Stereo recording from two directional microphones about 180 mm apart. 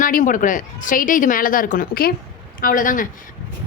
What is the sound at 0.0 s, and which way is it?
A woman's voice, 45° left (ahead or behind).